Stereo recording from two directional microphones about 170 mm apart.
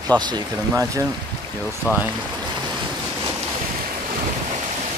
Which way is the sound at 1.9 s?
10° right (ahead or behind).